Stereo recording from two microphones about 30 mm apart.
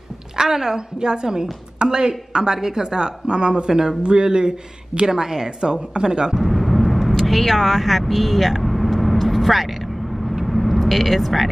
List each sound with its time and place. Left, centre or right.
0.4 s a woman's voice: centre
6.3 s speech: centre
8.6 s vehicle: centre